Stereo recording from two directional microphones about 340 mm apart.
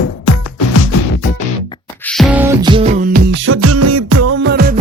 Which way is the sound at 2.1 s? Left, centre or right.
Centre.